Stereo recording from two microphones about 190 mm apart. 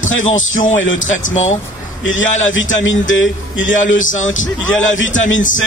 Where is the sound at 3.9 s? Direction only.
40° left (ahead or behind).